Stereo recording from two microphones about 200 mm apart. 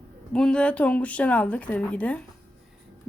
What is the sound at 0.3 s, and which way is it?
Speech, 5° left (ahead or behind).